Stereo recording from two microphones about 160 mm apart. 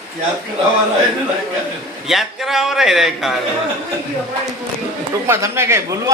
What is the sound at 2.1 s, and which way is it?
A man's voice, centre (ahead or behind).